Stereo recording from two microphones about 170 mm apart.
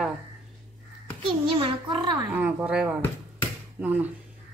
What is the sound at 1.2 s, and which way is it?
Speech, 30° right (ahead or behind).